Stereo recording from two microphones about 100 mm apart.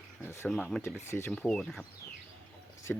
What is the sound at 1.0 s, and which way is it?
Speech, 25° left (ahead or behind).